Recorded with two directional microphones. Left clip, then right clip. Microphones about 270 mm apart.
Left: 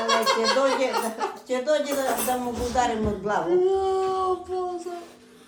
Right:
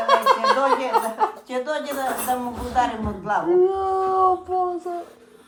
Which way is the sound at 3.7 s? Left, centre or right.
Centre.